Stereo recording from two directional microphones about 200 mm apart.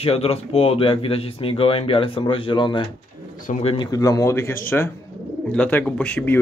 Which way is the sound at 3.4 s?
35° left (ahead or behind).